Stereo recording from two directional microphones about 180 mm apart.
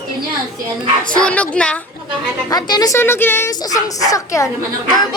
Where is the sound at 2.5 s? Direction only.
20° left (ahead or behind).